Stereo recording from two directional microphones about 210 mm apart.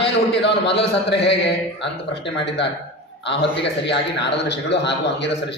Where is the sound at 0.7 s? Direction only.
55° left (ahead or behind).